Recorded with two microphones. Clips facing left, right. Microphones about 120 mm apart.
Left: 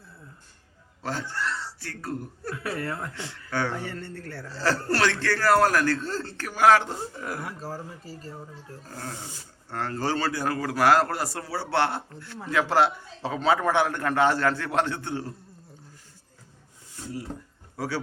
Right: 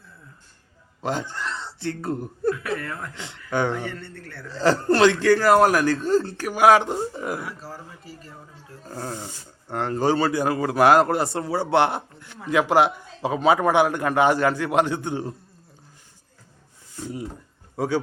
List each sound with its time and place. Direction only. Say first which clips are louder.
1.0 s speech: right 3 dB; 20° right (ahead or behind)
2.6 s speech: right 2 dB; 30° left (ahead or behind)
3.2 s speech: right 8 dB; 20° right (ahead or behind)
3.8 s a man's voice: right 1 dB; 40° left (ahead or behind)
4.5 s a man's voice: right 7 dB; 20° right (ahead or behind)
7.3 s speech: right 1 dB; 45° left (ahead or behind)
9.6 s a man's voice: right 6 dB; 20° right (ahead or behind)
17.7 s a man's voice: right 7 dB; 20° right (ahead or behind)